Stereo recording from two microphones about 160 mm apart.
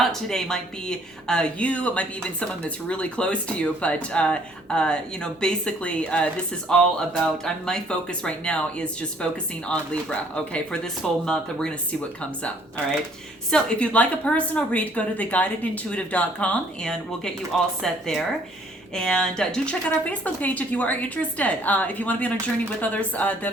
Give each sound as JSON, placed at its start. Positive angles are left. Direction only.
{"t": 0.0, "sound": "speech", "side_deg": 0}